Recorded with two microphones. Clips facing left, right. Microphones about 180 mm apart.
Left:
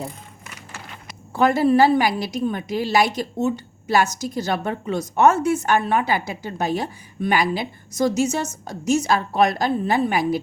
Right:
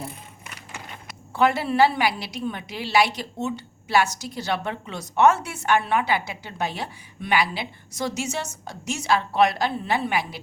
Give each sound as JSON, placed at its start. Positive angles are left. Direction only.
{"t": 1.3, "sound": "a woman's voice", "side_deg": 40}